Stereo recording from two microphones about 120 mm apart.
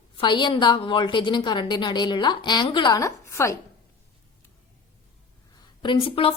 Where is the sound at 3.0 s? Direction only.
25° left (ahead or behind).